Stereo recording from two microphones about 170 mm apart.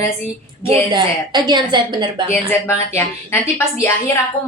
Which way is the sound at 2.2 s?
15° left (ahead or behind).